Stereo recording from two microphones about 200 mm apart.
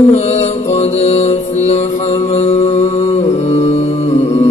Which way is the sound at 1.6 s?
35° left (ahead or behind).